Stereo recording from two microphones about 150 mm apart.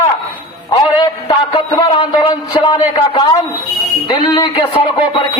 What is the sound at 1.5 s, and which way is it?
A man's voice, 35° left (ahead or behind).